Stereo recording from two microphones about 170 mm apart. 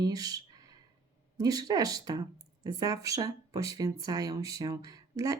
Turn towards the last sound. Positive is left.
turn(degrees=-20)  # may be behind; listen again after turning